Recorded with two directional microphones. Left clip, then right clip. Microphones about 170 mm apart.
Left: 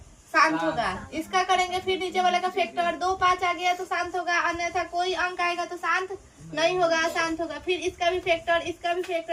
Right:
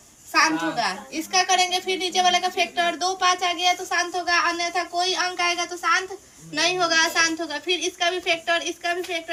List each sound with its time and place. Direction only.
0.3 s a child's voice: 20° left (ahead or behind)